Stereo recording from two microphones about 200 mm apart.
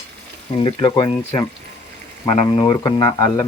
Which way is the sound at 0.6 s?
25° left (ahead or behind).